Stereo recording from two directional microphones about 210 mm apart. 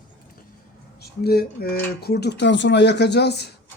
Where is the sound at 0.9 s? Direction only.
50° left (ahead or behind).